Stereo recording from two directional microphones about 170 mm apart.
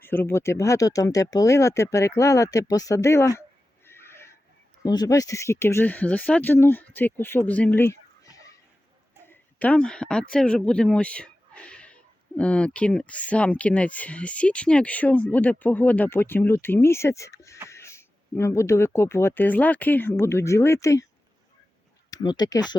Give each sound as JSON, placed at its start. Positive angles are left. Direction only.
{"t": 0.0, "sound": "speech", "side_deg": 10}
{"t": 3.8, "sound": "a sound", "side_deg": 15}
{"t": 4.8, "sound": "speech", "side_deg": 20}
{"t": 22.1, "sound": "speech", "side_deg": 25}